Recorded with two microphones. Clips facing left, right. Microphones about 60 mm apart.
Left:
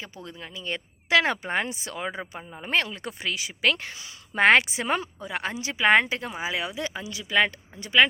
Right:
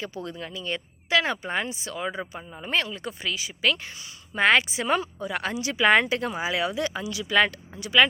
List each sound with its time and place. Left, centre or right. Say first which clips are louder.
0.0 s speech: right 6 dB; centre
0.5 s speech: even; left
1.1 s speech: left 2 dB; left
1.5 s speech: left 1 dB; left
2.2 s speech: right 2 dB; centre
2.6 s speech: left 1 dB; left
4.4 s speech: left 2 dB; left
5.2 s speech: right 2 dB; centre
5.8 s speech: even; centre
6.8 s speech: right 4 dB; left